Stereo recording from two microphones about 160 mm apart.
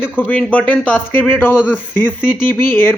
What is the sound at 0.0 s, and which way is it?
Speech, 10° left (ahead or behind).